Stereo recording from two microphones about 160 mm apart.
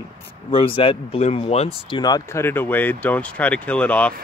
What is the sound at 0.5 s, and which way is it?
Speech, 35° left (ahead or behind).